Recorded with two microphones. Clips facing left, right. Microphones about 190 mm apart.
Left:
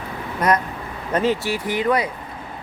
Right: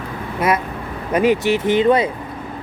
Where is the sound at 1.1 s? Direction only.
15° right (ahead or behind).